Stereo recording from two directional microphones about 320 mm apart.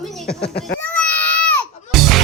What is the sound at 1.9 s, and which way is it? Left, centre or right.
Music, centre.